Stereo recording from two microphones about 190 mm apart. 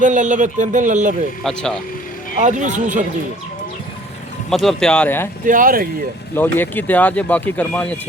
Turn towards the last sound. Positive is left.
turn(degrees=5)  # may be behind; listen again after turning